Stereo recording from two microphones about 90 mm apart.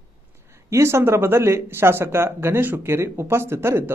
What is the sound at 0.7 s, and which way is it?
Speech, 30° right (ahead or behind).